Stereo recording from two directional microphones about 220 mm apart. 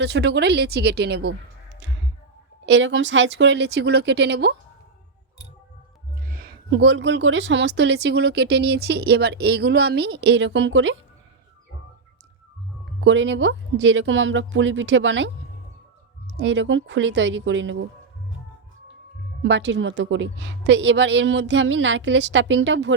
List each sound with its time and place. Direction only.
0.0 s speech: 50° right (ahead or behind)
2.6 s speech: 55° right (ahead or behind)
6.3 s a sound: 45° right (ahead or behind)
6.7 s speech: 60° right (ahead or behind)
13.1 s a woman's voice: 55° right (ahead or behind)
19.4 s a woman's voice: 55° right (ahead or behind)